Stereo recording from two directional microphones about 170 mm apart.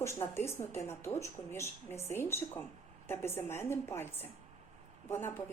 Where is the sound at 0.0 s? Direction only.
15° left (ahead or behind).